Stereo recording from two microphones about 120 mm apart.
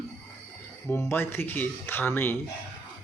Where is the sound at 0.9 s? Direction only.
20° left (ahead or behind).